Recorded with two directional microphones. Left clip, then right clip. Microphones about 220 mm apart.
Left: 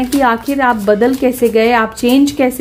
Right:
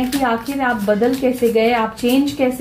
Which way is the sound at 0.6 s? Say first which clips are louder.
Left 5 dB; 55° left (ahead or behind).